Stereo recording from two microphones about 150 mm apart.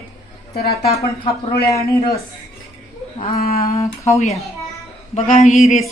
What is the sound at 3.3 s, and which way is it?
Speech, 80° left.